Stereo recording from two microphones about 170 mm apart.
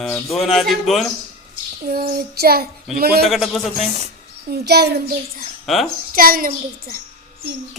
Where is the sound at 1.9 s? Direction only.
65° right (ahead or behind).